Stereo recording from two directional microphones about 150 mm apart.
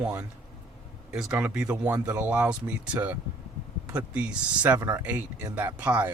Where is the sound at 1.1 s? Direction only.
5° right (ahead or behind).